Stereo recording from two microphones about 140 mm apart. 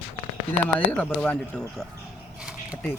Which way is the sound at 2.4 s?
5° right (ahead or behind).